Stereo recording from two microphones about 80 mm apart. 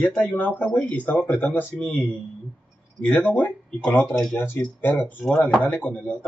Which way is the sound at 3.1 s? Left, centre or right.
Left.